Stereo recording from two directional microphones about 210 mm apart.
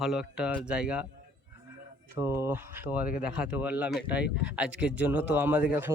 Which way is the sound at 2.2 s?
10° right (ahead or behind).